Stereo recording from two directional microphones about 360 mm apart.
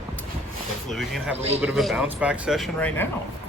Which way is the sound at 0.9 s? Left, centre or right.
Centre.